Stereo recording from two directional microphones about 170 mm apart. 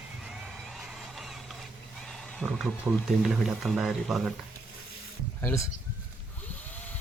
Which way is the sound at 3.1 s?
Centre (ahead or behind).